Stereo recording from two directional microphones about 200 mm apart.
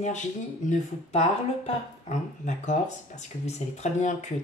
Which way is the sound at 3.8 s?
35° left (ahead or behind).